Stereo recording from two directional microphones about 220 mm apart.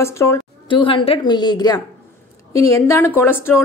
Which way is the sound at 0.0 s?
10° left (ahead or behind).